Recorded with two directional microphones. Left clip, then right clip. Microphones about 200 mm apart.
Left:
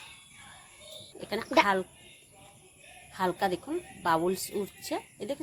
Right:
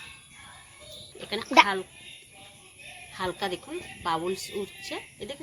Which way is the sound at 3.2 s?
55° left (ahead or behind).